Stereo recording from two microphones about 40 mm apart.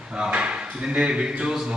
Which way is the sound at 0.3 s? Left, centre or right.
Right.